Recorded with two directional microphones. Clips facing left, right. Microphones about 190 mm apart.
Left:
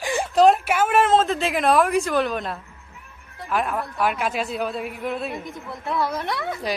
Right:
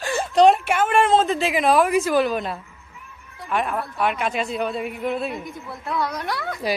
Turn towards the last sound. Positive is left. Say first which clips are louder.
# right 1 dB
turn(degrees=0)  # may be behind; listen again after turning